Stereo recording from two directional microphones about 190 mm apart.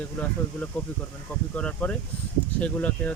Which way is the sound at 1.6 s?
5° left (ahead or behind).